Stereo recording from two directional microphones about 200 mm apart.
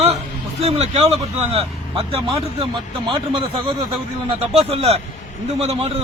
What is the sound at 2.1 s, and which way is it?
A man's voice, 25° right (ahead or behind).